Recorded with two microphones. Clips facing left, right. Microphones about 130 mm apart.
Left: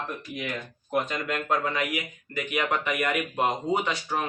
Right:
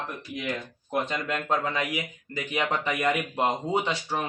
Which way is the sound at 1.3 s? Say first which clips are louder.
Left 1 dB; 25° right (ahead or behind).